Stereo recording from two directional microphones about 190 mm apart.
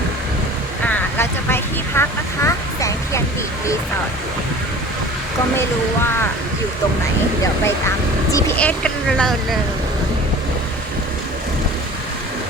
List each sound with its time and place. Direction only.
0.9 s vehicle: 10° left (ahead or behind)
8.3 s speech: 15° left (ahead or behind)
8.5 s speech: 5° left (ahead or behind)